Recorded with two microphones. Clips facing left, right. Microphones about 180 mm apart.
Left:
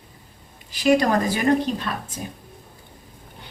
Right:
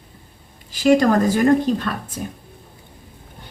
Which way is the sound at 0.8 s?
45° right (ahead or behind).